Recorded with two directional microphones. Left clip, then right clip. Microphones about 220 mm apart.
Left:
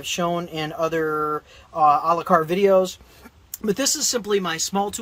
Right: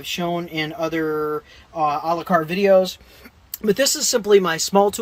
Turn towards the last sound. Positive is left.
turn(degrees=-20)  # may be behind; listen again after turning